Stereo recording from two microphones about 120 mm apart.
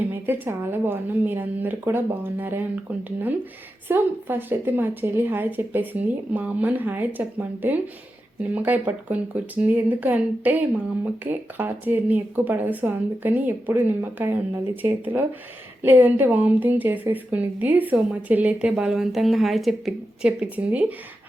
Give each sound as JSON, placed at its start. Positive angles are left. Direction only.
{"t": 0.1, "sound": "a woman's voice", "side_deg": -15}
{"t": 3.8, "sound": "a woman's voice", "side_deg": -15}
{"t": 20.2, "sound": "a woman's voice", "side_deg": -10}